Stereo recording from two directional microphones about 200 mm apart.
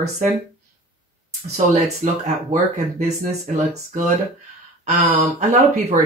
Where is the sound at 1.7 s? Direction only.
35° right (ahead or behind).